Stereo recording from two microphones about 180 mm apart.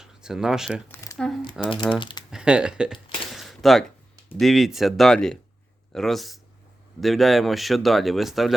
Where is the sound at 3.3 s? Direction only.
Centre (ahead or behind).